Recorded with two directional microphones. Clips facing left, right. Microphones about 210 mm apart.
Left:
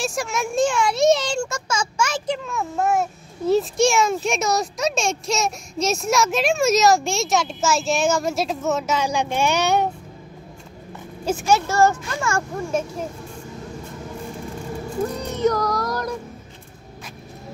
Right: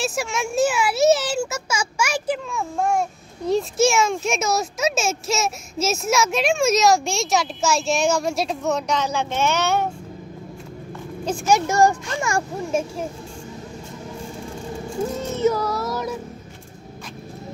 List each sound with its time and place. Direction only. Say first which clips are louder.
0.0 s a child's voice: even; centre (ahead or behind); by 9.8 s 15° left (ahead or behind)
11.4 s speech: right 1 dB; 15° right (ahead or behind)
15.1 s music: right 1 dB; 5° right (ahead or behind)